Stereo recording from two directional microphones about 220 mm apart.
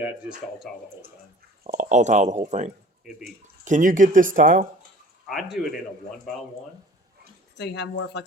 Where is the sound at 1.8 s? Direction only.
35° right (ahead or behind).